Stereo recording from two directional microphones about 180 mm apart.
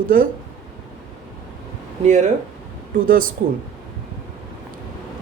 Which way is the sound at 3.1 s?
50° right (ahead or behind).